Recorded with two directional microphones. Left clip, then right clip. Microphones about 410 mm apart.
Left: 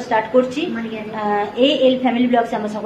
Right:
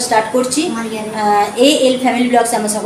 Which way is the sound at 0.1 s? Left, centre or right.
Left.